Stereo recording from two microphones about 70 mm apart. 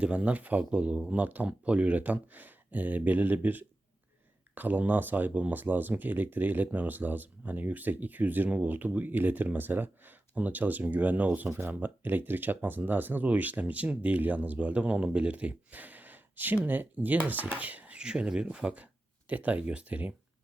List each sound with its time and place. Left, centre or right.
0.0 s speech: centre